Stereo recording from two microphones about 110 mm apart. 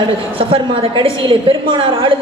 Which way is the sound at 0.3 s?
55° right (ahead or behind).